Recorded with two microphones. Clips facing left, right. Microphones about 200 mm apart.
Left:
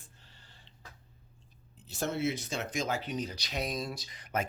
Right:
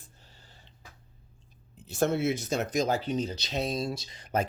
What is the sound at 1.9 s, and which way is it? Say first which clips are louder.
Speech: right 6 dB; 50° right (ahead or behind).